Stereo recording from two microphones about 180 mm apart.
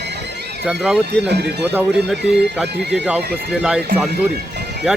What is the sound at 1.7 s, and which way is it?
Speech, 10° right (ahead or behind).